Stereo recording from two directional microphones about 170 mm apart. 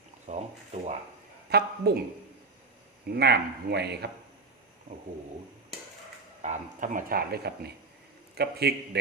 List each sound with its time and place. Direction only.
0.3 s a sound: 40° right (ahead or behind)
1.5 s speech: 70° right (ahead or behind)
3.1 s speech: 70° right (ahead or behind)
6.4 s speech: 45° right (ahead or behind); by 9.0 s 70° right (ahead or behind)